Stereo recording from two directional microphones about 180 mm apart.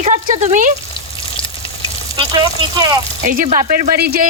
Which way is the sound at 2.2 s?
20° right (ahead or behind).